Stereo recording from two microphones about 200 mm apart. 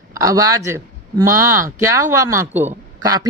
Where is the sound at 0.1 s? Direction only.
15° right (ahead or behind).